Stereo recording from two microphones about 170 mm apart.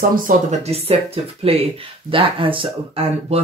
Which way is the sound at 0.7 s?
35° right (ahead or behind).